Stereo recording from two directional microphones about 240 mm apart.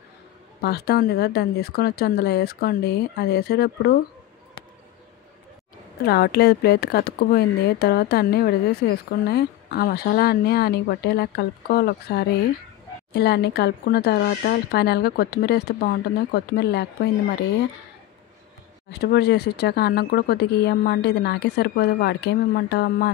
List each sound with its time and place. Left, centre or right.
0.6 s speech: left
6.0 s speech: left
18.9 s speech: left